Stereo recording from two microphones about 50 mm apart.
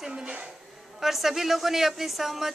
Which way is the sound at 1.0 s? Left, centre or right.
Centre.